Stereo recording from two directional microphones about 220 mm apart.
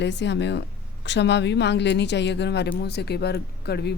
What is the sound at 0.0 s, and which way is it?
A woman's voice, 50° left (ahead or behind).